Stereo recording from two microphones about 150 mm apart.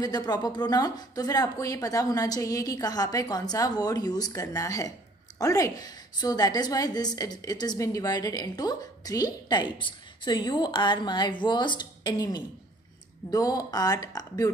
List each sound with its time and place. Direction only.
0.0 s a woman's voice: 25° left (ahead or behind)